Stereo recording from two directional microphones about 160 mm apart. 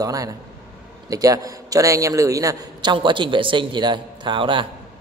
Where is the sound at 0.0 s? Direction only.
20° right (ahead or behind).